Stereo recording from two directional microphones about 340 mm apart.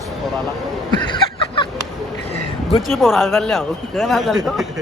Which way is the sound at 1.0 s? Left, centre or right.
Centre.